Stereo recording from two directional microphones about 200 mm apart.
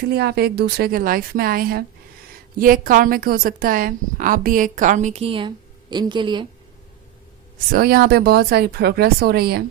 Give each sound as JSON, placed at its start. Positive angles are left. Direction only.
{"t": 0.1, "sound": "a woman's voice", "side_deg": -55}
{"t": 7.7, "sound": "speech", "side_deg": -50}